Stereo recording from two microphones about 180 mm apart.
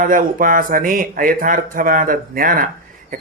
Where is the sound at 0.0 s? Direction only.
50° right (ahead or behind).